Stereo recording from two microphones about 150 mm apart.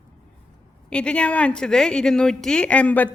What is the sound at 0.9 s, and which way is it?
Speech, 5° left (ahead or behind).